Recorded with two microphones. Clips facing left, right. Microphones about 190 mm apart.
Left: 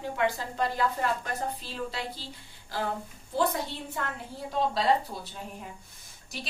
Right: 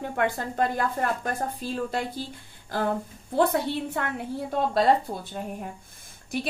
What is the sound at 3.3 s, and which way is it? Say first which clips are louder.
A woman's voice: right 5 dB; 60° right (ahead or behind).